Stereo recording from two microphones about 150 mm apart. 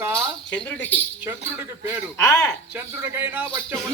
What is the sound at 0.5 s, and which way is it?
Speech, 10° left (ahead or behind).